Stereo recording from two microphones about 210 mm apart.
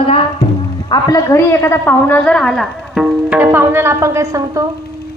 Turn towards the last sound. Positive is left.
turn(degrees=-15)  # may be behind; listen again after turning